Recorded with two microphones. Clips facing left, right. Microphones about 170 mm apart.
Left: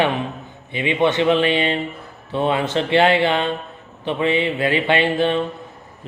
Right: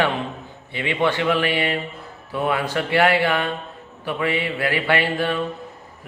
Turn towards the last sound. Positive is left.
turn(degrees=20)  # may be behind; listen again after turning